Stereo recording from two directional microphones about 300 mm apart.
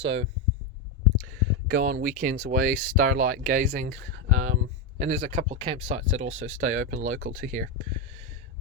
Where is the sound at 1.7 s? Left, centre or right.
Right.